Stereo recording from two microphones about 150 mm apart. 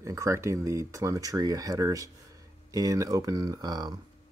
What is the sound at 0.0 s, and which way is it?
Speech, 20° right (ahead or behind).